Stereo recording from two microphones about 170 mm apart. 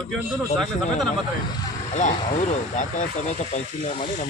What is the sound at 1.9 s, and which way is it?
Speech, 45° left (ahead or behind).